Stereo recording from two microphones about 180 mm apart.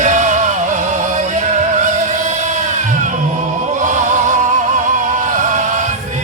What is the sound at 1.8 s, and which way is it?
Music, 45° right (ahead or behind).